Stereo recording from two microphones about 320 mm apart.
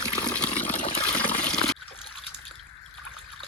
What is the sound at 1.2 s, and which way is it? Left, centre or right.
Water, centre.